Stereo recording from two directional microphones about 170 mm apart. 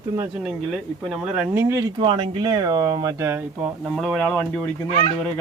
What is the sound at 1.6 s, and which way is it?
Speech, 20° right (ahead or behind).